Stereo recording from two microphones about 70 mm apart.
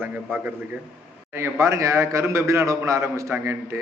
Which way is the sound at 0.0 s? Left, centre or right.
Right.